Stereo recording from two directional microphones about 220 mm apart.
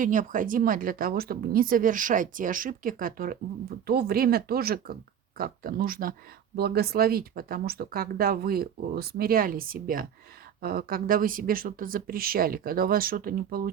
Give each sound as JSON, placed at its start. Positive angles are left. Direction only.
{"t": 0.0, "sound": "a woman's voice", "side_deg": -35}